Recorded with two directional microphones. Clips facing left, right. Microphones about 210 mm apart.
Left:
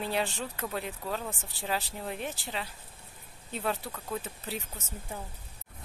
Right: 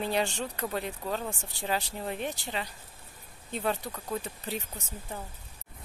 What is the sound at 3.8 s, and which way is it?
Speech, 15° right (ahead or behind).